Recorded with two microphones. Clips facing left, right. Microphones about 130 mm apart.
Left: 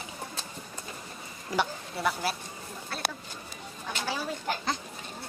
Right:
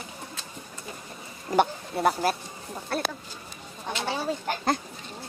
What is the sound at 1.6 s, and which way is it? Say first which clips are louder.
A woman's voice: right 7 dB; 50° right (ahead or behind).